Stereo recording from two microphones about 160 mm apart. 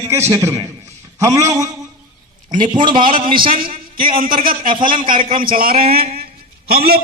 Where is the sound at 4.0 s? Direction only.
60° right (ahead or behind).